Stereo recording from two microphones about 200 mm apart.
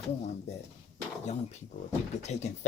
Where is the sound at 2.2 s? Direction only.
35° left (ahead or behind).